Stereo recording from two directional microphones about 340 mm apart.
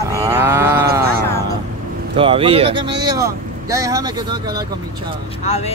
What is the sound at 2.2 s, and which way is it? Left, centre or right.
Speech, centre.